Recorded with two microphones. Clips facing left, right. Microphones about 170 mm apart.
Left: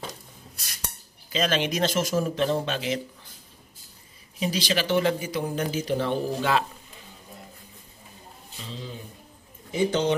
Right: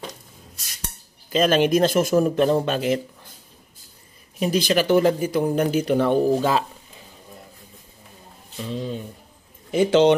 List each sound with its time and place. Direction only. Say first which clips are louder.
1.3 s speech: right 8 dB; 50° right (ahead or behind)
4.4 s speech: right 6 dB; 55° right (ahead or behind)
8.6 s speech: right 10 dB; 60° right (ahead or behind)
9.7 s a man's voice: right 8 dB; 90° right